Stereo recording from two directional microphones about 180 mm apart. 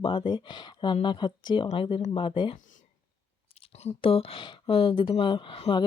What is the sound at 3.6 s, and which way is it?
Speech, 35° left (ahead or behind).